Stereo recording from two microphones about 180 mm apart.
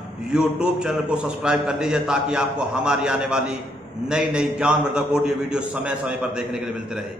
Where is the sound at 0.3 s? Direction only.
5° right (ahead or behind).